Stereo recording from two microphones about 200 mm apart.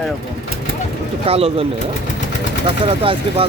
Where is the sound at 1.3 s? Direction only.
30° right (ahead or behind).